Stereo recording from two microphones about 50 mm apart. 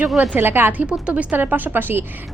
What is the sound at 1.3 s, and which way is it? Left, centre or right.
Speech, right.